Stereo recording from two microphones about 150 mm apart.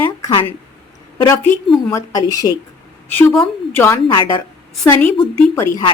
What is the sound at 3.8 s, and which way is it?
A woman's voice, 15° left (ahead or behind).